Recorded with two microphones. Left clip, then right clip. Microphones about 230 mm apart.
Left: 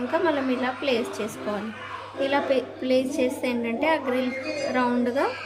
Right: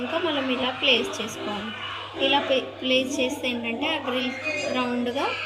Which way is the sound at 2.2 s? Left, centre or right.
Centre.